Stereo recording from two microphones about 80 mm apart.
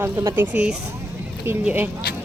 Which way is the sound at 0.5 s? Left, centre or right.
Centre.